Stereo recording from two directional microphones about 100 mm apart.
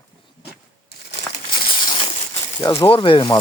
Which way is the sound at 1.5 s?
55° left (ahead or behind).